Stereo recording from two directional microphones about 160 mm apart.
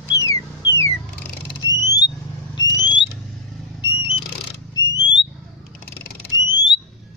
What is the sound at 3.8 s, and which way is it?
Vehicle, 30° left (ahead or behind).